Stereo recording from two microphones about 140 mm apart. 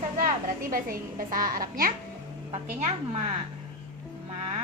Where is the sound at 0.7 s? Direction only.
85° right.